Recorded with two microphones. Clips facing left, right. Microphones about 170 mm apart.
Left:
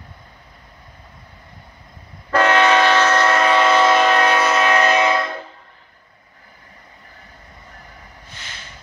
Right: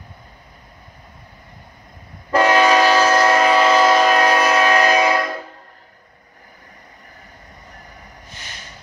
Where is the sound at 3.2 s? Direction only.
30° right (ahead or behind).